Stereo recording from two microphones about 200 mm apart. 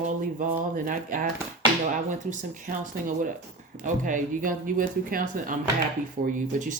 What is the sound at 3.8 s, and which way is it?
Speech, 40° right (ahead or behind).